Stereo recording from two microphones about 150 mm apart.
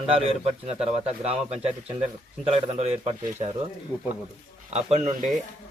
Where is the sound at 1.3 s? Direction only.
45° right (ahead or behind).